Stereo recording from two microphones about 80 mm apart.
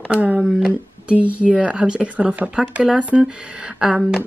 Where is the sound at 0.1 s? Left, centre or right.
Centre.